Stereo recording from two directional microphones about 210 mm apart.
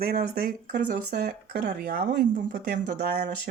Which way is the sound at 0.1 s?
35° right (ahead or behind).